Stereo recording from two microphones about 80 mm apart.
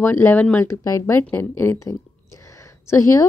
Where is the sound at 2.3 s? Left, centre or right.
Left.